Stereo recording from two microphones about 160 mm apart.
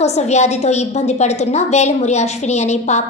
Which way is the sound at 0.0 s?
45° left (ahead or behind).